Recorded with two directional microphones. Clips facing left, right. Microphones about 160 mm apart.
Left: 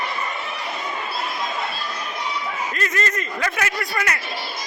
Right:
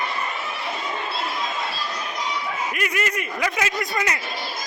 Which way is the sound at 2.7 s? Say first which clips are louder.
Left 2 dB; 10° right (ahead or behind).